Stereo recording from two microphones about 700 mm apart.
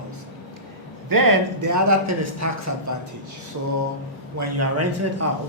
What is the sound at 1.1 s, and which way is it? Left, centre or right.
A man's voice, right.